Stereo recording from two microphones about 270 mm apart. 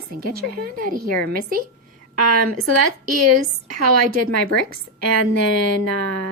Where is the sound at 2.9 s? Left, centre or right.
Right.